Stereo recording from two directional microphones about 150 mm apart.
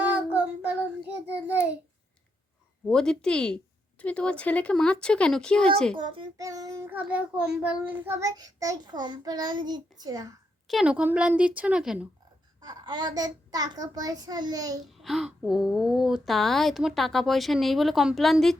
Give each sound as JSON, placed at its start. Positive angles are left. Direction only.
{"t": 0.0, "sound": "child singing", "side_deg": -10}
{"t": 2.8, "sound": "speech", "side_deg": 5}
{"t": 6.0, "sound": "child singing", "side_deg": -25}
{"t": 6.9, "sound": "child singing", "side_deg": -10}
{"t": 10.7, "sound": "a woman's voice", "side_deg": -5}
{"t": 12.6, "sound": "child singing", "side_deg": -30}
{"t": 14.8, "sound": "speech", "side_deg": 0}